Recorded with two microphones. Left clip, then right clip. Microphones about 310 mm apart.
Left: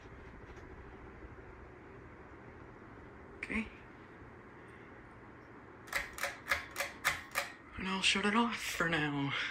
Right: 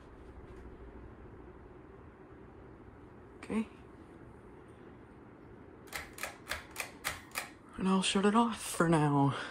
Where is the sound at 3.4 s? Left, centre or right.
Centre.